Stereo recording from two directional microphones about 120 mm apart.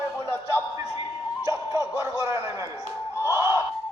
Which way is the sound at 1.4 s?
25° right (ahead or behind).